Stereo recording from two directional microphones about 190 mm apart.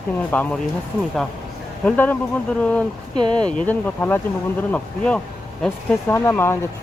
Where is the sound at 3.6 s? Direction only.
10° left (ahead or behind).